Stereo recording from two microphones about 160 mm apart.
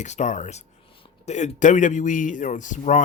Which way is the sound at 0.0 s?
45° left (ahead or behind).